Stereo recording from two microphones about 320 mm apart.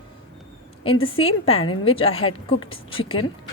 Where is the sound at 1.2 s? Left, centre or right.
Centre.